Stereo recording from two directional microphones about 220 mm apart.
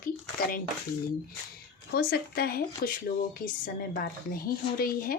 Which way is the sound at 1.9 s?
45° left (ahead or behind).